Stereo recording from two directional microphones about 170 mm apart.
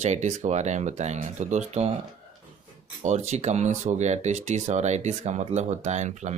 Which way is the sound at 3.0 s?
40° right (ahead or behind).